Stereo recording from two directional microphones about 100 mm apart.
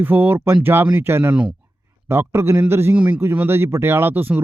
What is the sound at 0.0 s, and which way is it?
Speech, 20° right (ahead or behind).